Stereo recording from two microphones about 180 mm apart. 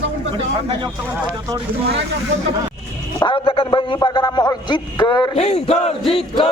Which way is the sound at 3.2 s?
25° left (ahead or behind).